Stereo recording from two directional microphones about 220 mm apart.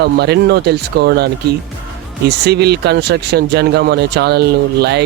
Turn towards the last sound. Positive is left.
turn(degrees=-50)  # may be behind; listen again after turning